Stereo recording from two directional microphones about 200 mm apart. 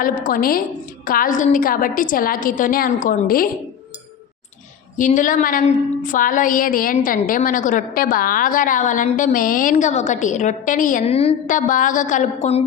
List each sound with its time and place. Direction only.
0.0 s a woman's voice: 45° left (ahead or behind)
4.9 s a woman's voice: 40° left (ahead or behind)